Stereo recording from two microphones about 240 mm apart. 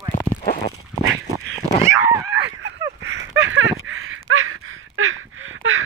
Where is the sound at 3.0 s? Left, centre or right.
Right.